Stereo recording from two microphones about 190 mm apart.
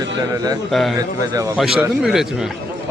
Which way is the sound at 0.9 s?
20° right (ahead or behind).